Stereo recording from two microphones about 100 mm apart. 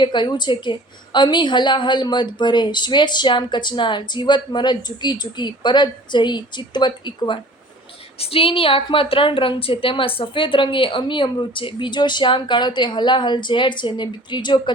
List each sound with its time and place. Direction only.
0.0 s a woman's voice: 50° left (ahead or behind)
8.2 s a woman's voice: 70° left (ahead or behind); by 14.6 s 50° left (ahead or behind)